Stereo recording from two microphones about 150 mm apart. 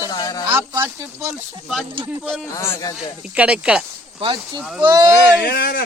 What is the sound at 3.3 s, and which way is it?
Speech, 5° right (ahead or behind).